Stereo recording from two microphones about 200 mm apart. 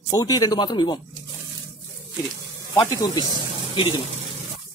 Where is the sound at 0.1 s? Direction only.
20° left (ahead or behind).